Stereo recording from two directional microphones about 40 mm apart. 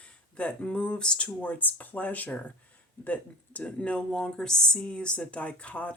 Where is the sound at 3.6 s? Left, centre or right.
Left.